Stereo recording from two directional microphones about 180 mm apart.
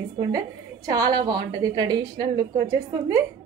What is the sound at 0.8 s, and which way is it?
A woman's voice, 20° right (ahead or behind).